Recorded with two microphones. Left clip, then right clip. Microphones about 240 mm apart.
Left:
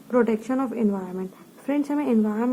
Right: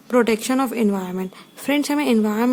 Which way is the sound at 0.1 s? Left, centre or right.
Right.